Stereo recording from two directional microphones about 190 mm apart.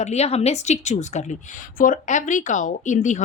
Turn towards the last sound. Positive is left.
turn(degrees=40)  # may be behind; listen again after turning